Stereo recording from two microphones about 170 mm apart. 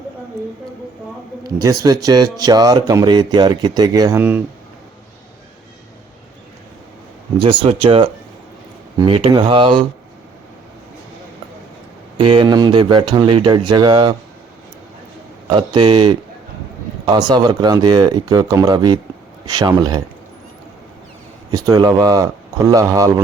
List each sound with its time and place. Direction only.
1.5 s speech: 20° right (ahead or behind)
4.2 s speech: 10° right (ahead or behind)
7.3 s speech: 30° right (ahead or behind)
12.1 s speech: 30° right (ahead or behind)
15.4 s speech: 30° right (ahead or behind)
17.2 s speech: 25° right (ahead or behind)
21.5 s speech: 20° right (ahead or behind)